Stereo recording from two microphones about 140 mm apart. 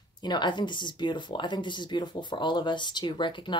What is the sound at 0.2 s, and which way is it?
Speech, 30° left (ahead or behind).